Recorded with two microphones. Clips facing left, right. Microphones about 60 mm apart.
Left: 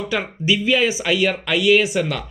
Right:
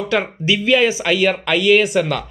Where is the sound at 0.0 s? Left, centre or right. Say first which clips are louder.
Right 4 dB; centre.